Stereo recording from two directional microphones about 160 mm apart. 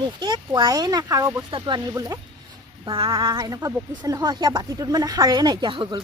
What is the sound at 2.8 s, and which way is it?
Speech, 35° right (ahead or behind).